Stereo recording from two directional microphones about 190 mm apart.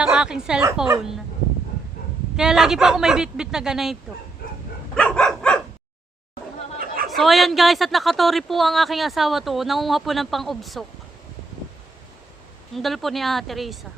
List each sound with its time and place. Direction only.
0.0 s speech: 5° right (ahead or behind)
2.3 s speech: 5° right (ahead or behind)
4.9 s dog: 5° left (ahead or behind)
6.7 s chatter: 50° right (ahead or behind)
7.1 s speech: centre (ahead or behind)
12.7 s speech: centre (ahead or behind)